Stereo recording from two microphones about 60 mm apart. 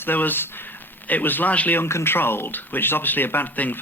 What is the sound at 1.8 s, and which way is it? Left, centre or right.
Speech, left.